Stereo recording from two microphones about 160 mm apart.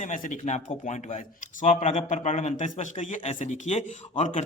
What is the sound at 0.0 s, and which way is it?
Speech, 55° left (ahead or behind).